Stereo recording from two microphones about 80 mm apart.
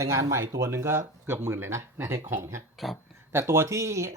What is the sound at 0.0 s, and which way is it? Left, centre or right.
Speech, right.